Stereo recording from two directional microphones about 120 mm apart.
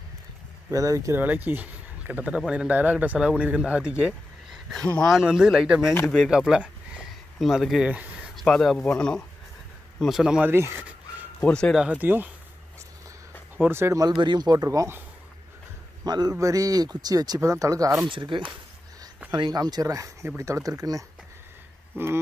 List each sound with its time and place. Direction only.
0.7 s speech: 25° right (ahead or behind)
1.2 s speech: 15° right (ahead or behind)
4.9 s speech: 5° left (ahead or behind)
8.4 s speech: 5° left (ahead or behind)
10.5 s speech: 20° right (ahead or behind)
11.4 s speech: 5° left (ahead or behind)
11.8 s speech: 10° right (ahead or behind)
13.7 s speech: 20° right (ahead or behind)
14.1 s speech: 40° right (ahead or behind)
16.0 s speech: 35° right (ahead or behind)
18.1 s speech: 45° right (ahead or behind); by 22.2 s 20° right (ahead or behind)